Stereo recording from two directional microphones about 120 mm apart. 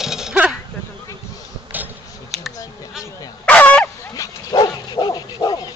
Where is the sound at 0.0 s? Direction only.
5° right (ahead or behind).